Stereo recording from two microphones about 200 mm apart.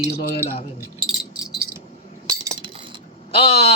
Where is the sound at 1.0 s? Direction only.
5° right (ahead or behind).